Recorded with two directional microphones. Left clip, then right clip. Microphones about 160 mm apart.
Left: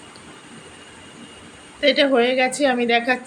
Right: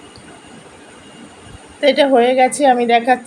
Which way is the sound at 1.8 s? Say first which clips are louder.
Right 5 dB; 15° right (ahead or behind).